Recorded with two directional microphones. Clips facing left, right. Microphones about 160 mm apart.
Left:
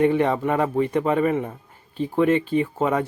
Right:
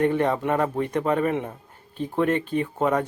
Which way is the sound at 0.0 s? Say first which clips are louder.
Left 2 dB; 10° left (ahead or behind).